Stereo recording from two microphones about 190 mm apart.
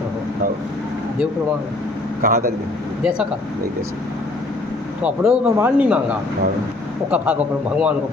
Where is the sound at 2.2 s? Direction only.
50° right (ahead or behind).